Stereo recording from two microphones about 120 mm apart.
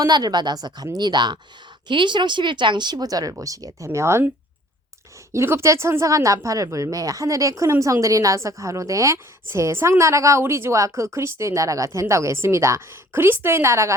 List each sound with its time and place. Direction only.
0.0 s speech: 35° right (ahead or behind)
5.3 s speech: 20° right (ahead or behind)